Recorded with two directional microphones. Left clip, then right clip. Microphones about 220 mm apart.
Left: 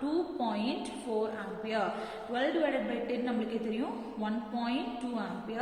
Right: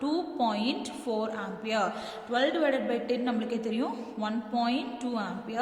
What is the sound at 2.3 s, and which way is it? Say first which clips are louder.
A woman's voice: right 4 dB; 55° right (ahead or behind).